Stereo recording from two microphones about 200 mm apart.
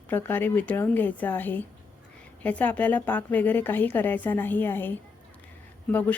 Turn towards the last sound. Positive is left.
turn(degrees=10)  # may be behind; listen again after turning